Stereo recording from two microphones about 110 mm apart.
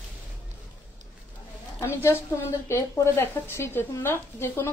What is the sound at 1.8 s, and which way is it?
Speech, 25° left (ahead or behind).